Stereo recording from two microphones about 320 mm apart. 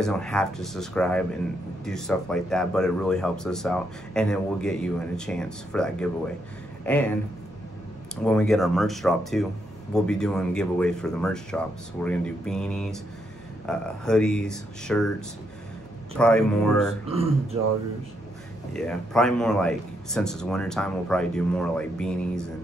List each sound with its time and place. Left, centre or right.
0.0 s speech: centre
8.2 s speech: centre
17.1 s speech: centre
18.7 s speech: centre